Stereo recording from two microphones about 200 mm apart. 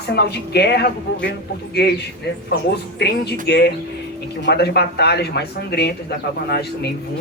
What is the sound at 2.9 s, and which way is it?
Speech, 55° left (ahead or behind).